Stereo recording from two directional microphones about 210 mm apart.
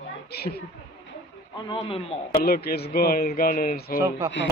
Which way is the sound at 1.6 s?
25° left (ahead or behind).